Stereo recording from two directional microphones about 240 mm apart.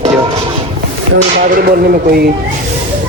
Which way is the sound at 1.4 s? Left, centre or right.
Right.